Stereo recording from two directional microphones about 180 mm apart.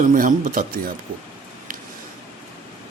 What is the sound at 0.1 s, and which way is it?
Speech, 45° right (ahead or behind).